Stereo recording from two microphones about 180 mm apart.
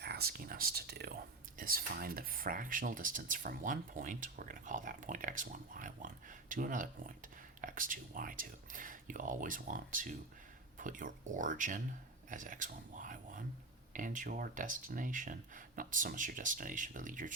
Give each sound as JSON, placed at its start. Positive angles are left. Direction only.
{"t": 0.0, "sound": "speech", "side_deg": -60}